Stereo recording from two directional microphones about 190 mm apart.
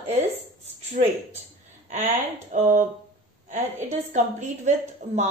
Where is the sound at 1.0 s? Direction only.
50° right (ahead or behind).